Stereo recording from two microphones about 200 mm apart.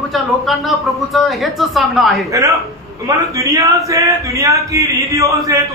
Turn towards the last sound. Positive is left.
turn(degrees=-15)  # may be behind; listen again after turning